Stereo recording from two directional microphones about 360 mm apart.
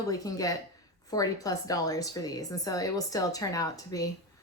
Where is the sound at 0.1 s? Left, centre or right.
Centre.